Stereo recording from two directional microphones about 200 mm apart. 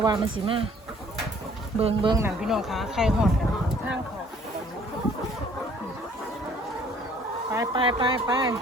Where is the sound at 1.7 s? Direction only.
25° right (ahead or behind).